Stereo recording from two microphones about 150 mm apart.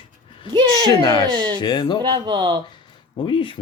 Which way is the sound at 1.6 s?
30° left (ahead or behind).